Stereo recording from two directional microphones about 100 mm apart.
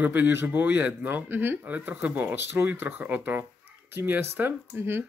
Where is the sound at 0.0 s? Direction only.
20° right (ahead or behind).